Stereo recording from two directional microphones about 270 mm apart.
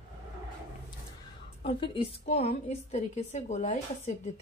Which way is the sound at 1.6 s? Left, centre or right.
Left.